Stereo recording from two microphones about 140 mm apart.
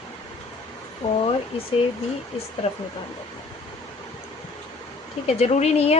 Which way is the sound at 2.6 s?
50° left (ahead or behind).